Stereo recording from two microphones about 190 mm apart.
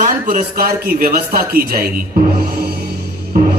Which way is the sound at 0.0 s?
45° right (ahead or behind).